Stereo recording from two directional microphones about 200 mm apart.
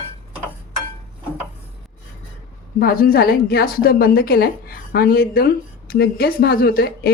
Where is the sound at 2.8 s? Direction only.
50° left (ahead or behind).